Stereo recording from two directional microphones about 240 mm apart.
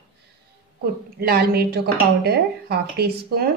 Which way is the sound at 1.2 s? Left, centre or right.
Right.